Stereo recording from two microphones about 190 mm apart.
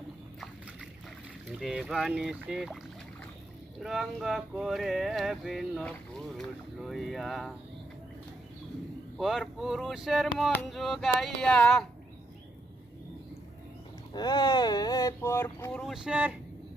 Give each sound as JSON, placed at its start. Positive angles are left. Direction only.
{"t": 1.5, "sound": "speech", "side_deg": 0}
{"t": 3.8, "sound": "speech", "side_deg": 0}
{"t": 9.1, "sound": "speech", "side_deg": 0}
{"t": 14.1, "sound": "speech", "side_deg": 25}